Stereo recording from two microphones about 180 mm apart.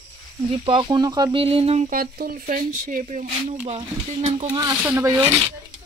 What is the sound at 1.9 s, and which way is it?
A child's voice, 50° right (ahead or behind).